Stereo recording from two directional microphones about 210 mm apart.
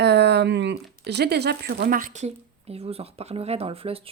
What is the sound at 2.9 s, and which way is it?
Speech, 30° right (ahead or behind).